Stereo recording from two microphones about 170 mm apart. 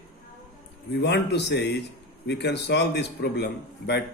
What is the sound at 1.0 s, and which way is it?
A man's voice, 85° left.